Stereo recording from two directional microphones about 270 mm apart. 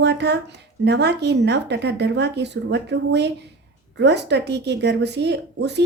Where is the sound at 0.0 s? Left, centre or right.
Right.